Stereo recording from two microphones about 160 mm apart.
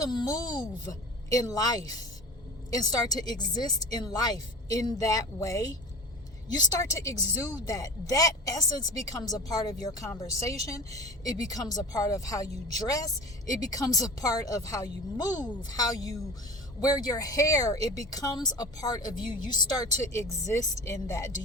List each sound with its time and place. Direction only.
0.0 s speech: 25° left (ahead or behind)
13.5 s speech: 20° left (ahead or behind)